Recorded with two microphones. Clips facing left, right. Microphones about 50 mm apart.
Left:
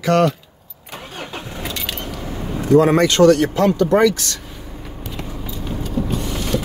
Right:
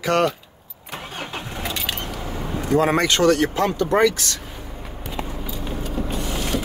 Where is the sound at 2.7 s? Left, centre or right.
Centre.